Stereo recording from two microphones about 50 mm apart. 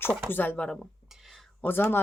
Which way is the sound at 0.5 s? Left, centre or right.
Left.